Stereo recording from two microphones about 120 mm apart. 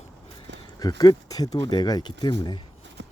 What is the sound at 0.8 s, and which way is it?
Speech, 35° left (ahead or behind).